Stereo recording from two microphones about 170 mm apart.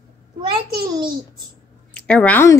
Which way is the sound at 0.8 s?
20° right (ahead or behind).